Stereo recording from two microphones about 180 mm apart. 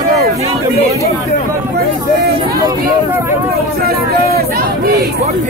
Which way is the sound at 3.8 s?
60° right (ahead or behind).